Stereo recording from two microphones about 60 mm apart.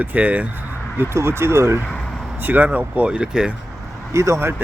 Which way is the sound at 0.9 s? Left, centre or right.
Right.